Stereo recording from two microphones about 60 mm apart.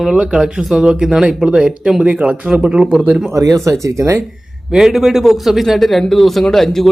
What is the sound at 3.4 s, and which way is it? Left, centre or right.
Speech, right.